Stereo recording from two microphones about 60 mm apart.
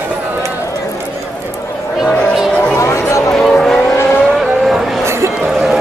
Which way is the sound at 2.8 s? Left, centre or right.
Left.